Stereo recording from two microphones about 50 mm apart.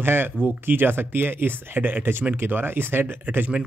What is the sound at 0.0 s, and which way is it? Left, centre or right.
Speech, right.